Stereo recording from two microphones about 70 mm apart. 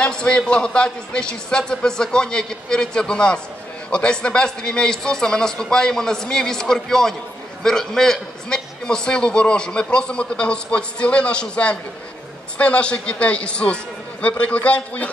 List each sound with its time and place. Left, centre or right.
0.0 s a man's voice: centre